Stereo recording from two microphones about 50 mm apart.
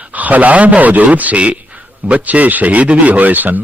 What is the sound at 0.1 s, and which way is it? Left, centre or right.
A man's voice, right.